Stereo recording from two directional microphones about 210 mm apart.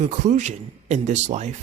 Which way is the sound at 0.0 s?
35° right (ahead or behind).